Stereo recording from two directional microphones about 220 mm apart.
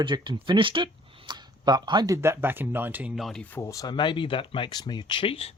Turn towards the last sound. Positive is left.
turn(degrees=25)  # may be behind; listen again after turning